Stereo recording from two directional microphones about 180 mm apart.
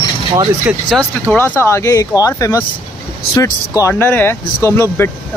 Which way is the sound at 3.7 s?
15° left (ahead or behind).